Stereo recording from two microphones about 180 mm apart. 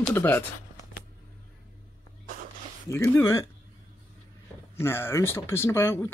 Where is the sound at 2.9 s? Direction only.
15° left (ahead or behind).